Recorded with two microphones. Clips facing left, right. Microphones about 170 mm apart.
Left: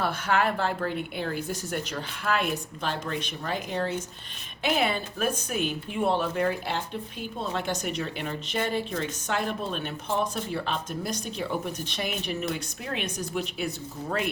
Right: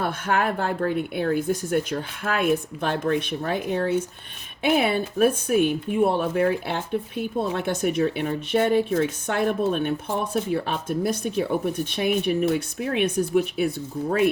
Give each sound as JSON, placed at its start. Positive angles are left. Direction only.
{"t": 0.0, "sound": "speech", "side_deg": -50}